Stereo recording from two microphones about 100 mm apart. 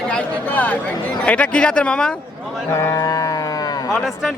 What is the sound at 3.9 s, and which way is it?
Speech, 5° left (ahead or behind).